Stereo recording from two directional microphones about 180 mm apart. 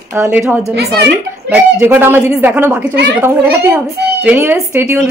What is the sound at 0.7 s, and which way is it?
Speech, 65° right (ahead or behind).